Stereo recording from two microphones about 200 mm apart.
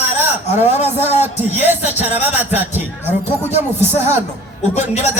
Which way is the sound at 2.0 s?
10° right (ahead or behind).